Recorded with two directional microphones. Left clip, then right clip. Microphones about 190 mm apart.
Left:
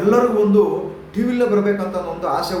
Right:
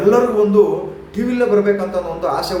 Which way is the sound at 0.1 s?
10° right (ahead or behind).